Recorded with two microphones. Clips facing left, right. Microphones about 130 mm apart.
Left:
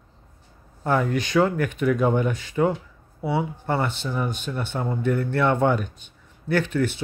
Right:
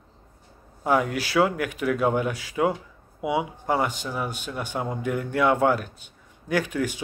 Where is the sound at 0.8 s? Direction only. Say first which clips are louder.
Even; 10° right (ahead or behind).